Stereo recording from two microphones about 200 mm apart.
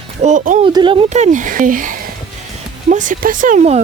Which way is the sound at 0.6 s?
25° right (ahead or behind).